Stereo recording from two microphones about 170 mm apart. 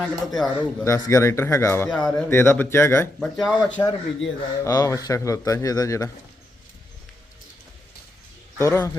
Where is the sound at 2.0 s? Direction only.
5° left (ahead or behind).